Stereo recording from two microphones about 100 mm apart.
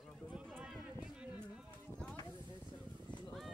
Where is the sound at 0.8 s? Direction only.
10° right (ahead or behind).